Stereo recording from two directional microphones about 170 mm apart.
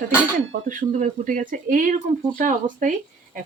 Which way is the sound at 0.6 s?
50° right (ahead or behind).